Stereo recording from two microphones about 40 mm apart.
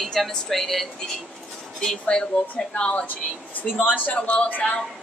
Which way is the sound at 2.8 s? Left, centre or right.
Left.